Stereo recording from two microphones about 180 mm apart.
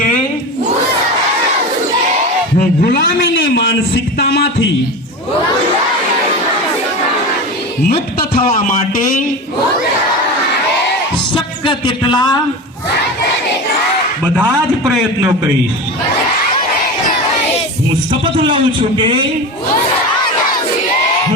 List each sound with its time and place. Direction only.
3.3 s a man's voice: 85° left
7.9 s speech: 60° left (ahead or behind)
11.3 s speech: 25° left (ahead or behind)
18.3 s a man's voice: 25° right (ahead or behind)